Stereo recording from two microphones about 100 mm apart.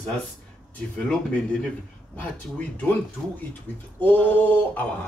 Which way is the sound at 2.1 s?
15° left (ahead or behind).